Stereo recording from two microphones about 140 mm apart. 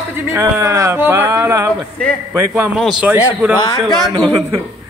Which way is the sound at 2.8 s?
Centre (ahead or behind).